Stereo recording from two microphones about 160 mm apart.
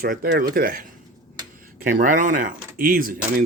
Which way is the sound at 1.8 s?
55° right (ahead or behind).